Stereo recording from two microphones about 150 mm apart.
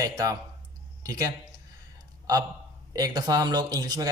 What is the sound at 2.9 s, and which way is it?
Speech, 25° right (ahead or behind).